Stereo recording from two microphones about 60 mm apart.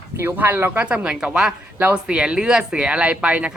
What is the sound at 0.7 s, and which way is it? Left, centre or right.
A woman's voice, right.